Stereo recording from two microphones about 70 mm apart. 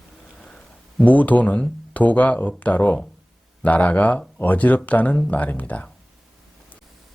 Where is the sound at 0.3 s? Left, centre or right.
Centre.